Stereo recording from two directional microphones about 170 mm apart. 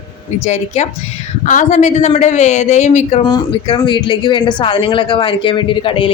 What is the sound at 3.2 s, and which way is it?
Speech, 25° left (ahead or behind).